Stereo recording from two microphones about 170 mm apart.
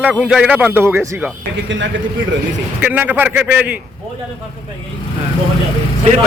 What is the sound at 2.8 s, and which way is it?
A man's voice, 10° right (ahead or behind).